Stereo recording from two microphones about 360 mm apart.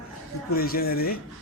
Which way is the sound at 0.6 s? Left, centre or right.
Left.